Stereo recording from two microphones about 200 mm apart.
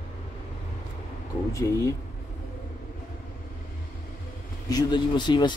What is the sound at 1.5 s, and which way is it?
Speech, 15° left (ahead or behind).